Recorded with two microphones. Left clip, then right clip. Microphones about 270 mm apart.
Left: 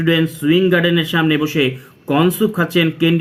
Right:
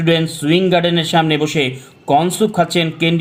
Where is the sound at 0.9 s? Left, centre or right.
Right.